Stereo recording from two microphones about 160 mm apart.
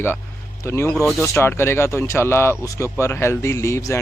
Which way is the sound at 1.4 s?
15° left (ahead or behind).